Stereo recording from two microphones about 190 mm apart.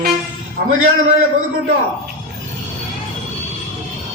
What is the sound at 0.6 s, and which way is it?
Speech, 50° right (ahead or behind).